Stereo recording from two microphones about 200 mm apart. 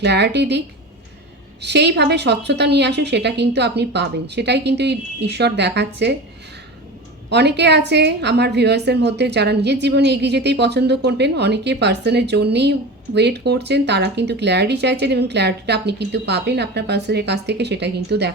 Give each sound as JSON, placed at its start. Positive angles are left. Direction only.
{"t": 0.0, "sound": "a woman's voice", "side_deg": -60}
{"t": 1.6, "sound": "a woman's voice", "side_deg": -55}
{"t": 7.3, "sound": "a woman's voice", "side_deg": -55}